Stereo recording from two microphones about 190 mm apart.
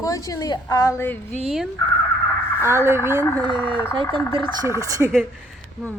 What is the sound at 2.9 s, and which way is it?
Speech, 15° right (ahead or behind).